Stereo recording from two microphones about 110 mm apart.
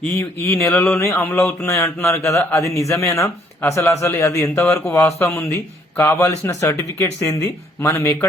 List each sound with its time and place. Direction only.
0.0 s a man's voice: 20° left (ahead or behind)